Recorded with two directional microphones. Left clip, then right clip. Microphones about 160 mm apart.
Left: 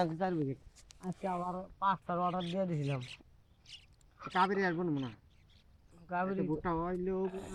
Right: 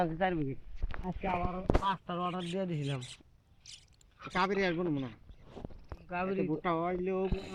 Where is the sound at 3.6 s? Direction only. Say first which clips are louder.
Right 1 dB; 75° right (ahead or behind).